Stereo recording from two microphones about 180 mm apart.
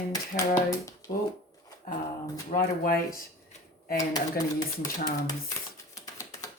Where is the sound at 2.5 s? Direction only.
55° left (ahead or behind).